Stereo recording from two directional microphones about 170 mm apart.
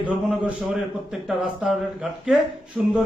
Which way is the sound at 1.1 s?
Centre (ahead or behind).